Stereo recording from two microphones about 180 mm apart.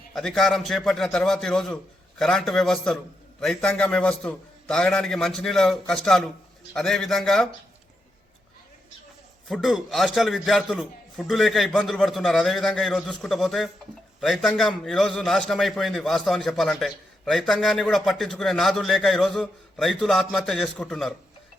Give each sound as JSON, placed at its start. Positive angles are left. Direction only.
{"t": 0.1, "sound": "a man's voice", "side_deg": 5}
{"t": 9.5, "sound": "a man's voice", "side_deg": 0}